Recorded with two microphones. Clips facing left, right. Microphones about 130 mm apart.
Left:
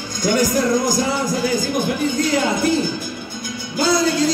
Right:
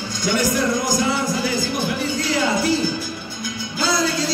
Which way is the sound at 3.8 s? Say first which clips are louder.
Left 4 dB; 50° left (ahead or behind).